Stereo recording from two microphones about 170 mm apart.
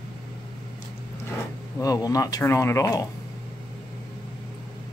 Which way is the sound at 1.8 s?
20° left (ahead or behind).